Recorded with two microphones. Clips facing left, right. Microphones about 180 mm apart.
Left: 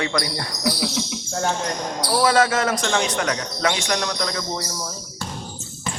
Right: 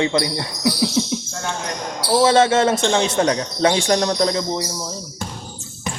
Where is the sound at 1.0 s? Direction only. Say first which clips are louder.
Right 7 dB; 30° right (ahead or behind).